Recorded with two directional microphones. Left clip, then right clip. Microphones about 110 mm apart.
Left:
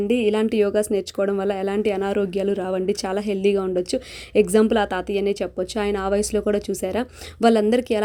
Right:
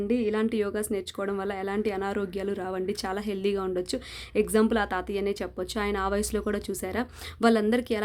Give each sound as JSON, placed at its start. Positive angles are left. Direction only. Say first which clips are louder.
{"t": 0.1, "sound": "speech", "louder": "left 6 dB", "side_deg": 40}